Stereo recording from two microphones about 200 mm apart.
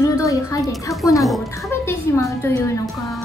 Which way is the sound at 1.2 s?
Centre (ahead or behind).